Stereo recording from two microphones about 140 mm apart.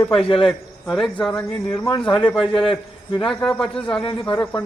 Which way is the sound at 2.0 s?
5° left (ahead or behind).